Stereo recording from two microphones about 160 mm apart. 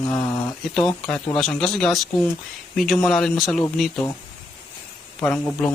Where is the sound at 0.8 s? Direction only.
5° left (ahead or behind).